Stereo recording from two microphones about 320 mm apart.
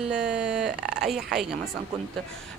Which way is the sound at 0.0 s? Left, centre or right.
Centre.